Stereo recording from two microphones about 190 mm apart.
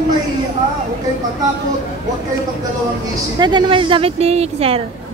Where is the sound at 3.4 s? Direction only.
25° right (ahead or behind).